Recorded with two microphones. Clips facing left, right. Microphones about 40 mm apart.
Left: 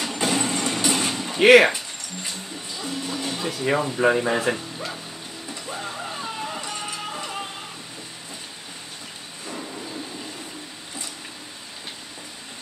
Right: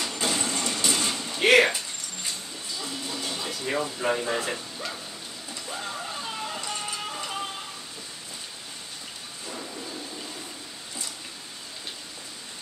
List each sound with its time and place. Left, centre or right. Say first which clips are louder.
0.0 s a sound: left 4 dB; left
3.0 s music: left 6 dB; left
3.8 s speech: left 8 dB; left
5.5 s music: left 2 dB; centre